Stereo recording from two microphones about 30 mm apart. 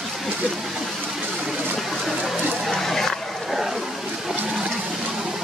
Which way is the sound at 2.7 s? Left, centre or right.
Centre.